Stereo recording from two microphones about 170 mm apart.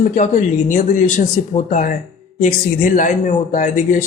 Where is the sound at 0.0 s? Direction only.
45° left (ahead or behind).